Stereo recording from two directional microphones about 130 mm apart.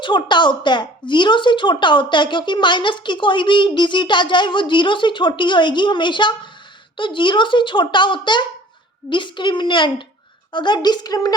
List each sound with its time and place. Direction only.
0.0 s speech: 35° left (ahead or behind)